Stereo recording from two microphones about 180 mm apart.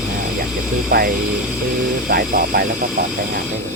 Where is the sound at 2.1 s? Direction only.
60° right (ahead or behind).